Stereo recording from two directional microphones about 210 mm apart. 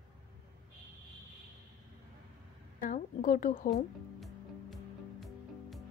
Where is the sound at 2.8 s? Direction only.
40° left (ahead or behind).